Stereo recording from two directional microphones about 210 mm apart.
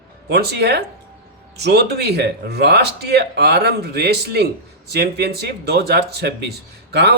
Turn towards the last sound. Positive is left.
turn(degrees=-50)  # may be behind; listen again after turning